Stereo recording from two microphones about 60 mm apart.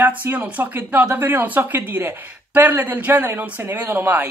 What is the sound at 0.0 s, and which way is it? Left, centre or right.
Speech, right.